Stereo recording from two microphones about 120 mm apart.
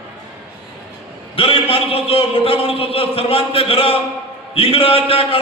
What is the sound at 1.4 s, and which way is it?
Speech, 50° left (ahead or behind).